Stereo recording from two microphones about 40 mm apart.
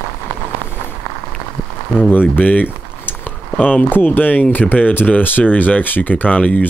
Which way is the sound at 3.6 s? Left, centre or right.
Left.